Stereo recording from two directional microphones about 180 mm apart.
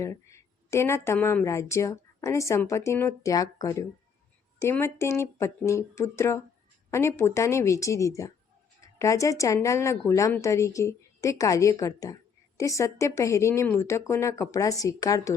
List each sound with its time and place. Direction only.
0.0 s a woman's voice: 15° left (ahead or behind)